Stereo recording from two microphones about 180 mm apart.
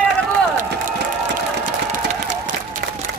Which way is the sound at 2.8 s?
70° right (ahead or behind).